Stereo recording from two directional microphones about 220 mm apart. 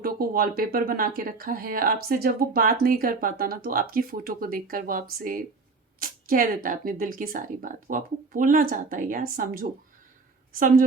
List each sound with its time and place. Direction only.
0.0 s speech: 40° right (ahead or behind)